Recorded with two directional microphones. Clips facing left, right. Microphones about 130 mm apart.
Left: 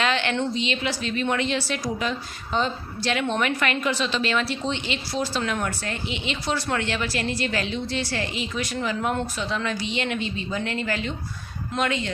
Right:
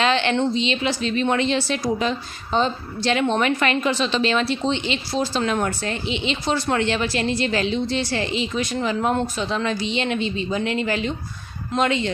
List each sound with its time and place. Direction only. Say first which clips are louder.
0.0 s a woman's voice: right 4 dB; 25° right (ahead or behind)